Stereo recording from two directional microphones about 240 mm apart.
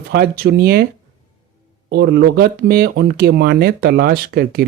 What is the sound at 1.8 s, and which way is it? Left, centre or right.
Speech, right.